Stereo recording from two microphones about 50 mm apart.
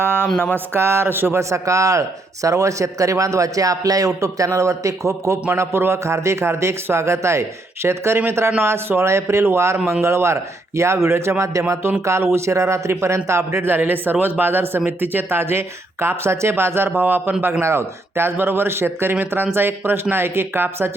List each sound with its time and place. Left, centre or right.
0.0 s a sound: right
0.5 s speech: right
1.4 s a man's voice: right
11.7 s a man's voice: right
13.7 s speech: right
16.9 s a man's voice: right
17.6 s speech: right